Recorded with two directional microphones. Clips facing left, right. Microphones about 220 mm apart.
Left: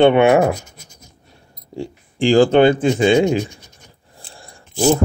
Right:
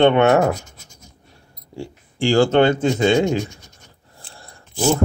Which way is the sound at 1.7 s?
15° left (ahead or behind).